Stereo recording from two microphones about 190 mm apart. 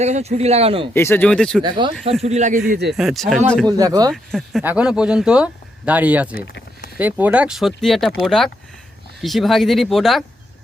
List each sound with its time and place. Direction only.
0.0 s speech: 35° right (ahead or behind)
0.9 s speech: 10° left (ahead or behind)
1.6 s speech: 25° right (ahead or behind)
2.2 s speech: 40° right (ahead or behind)
2.9 s speech: centre (ahead or behind)
3.7 s speech: 20° right (ahead or behind)
4.1 s speech: centre (ahead or behind)
6.3 s a sound: 50° left (ahead or behind)
7.0 s speech: 10° right (ahead or behind)